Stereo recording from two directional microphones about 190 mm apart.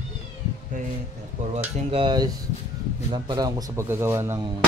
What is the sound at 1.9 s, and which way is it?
A man's voice, 25° right (ahead or behind).